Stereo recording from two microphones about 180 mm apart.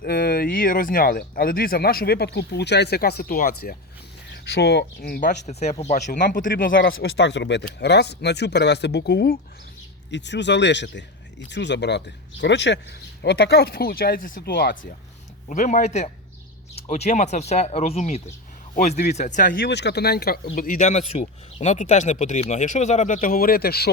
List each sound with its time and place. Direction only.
0.0 s speech: 55° left (ahead or behind)
4.4 s speech: 65° left (ahead or behind)
5.5 s speech: 35° left (ahead or behind)
6.9 s speech: 70° left (ahead or behind)
10.1 s speech: 75° left (ahead or behind); by 14.8 s 60° left (ahead or behind)
15.4 s speech: 45° left (ahead or behind); by 23.9 s 60° left (ahead or behind)